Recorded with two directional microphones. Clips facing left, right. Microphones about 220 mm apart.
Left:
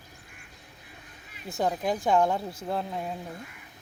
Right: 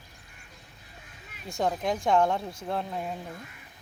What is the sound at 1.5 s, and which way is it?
Speech, 5° left (ahead or behind).